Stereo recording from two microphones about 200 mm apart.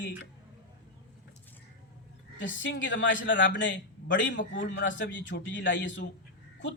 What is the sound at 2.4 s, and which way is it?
A man's voice, 65° left (ahead or behind).